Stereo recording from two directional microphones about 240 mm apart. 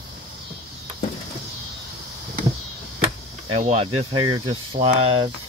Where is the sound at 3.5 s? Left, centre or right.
Right.